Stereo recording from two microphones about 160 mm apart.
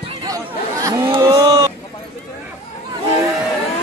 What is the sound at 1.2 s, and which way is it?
Chicken, 20° right (ahead or behind).